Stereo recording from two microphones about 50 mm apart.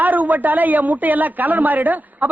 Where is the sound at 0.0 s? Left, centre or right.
Right.